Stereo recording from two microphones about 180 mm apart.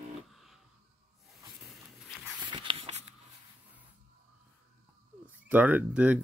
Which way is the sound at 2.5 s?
30° right (ahead or behind).